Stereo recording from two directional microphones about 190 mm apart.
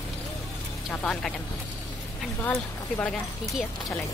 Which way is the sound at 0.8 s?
5° left (ahead or behind).